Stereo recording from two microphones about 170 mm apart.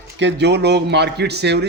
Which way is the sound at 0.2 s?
90° right.